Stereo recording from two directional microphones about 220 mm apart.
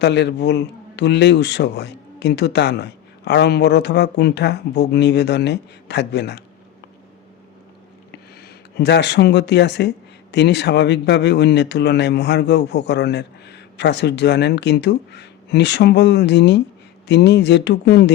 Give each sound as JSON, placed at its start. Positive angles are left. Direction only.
{"t": 0.0, "sound": "a man's voice", "side_deg": 50}
{"t": 8.4, "sound": "a man's voice", "side_deg": 50}